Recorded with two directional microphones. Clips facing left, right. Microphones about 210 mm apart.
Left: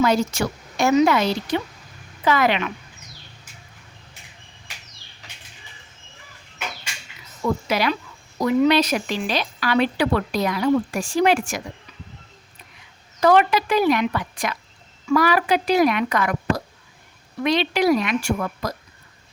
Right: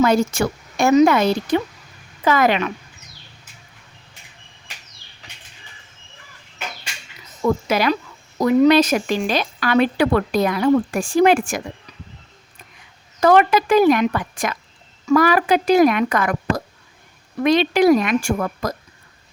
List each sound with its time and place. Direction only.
0.0 s speech: 50° right (ahead or behind)
7.4 s speech: 45° right (ahead or behind)
13.1 s speech: 50° right (ahead or behind)